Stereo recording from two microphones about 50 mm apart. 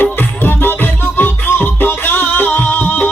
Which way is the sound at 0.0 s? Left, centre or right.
Left.